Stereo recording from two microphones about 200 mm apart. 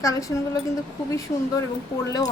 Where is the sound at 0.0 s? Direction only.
15° left (ahead or behind).